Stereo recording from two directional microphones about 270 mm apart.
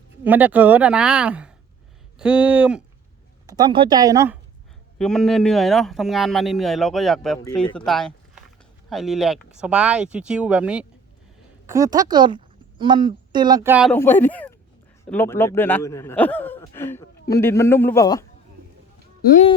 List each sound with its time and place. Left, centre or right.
0.3 s speech: centre
4.9 s a woman's voice: centre
13.9 s speech: centre
19.2 s speech: left